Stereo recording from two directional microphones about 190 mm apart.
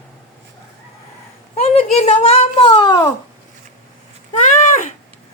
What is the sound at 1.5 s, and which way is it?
Speech, 30° left (ahead or behind).